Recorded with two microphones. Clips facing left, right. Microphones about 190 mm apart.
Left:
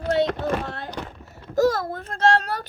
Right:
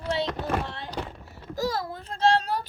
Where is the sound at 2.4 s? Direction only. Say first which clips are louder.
Even; 80° left.